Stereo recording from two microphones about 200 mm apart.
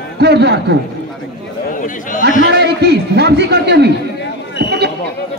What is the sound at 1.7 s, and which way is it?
Speech, 40° left (ahead or behind).